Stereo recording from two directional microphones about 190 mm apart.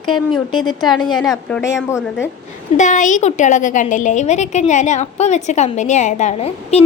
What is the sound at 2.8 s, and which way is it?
A woman's voice, 40° left (ahead or behind).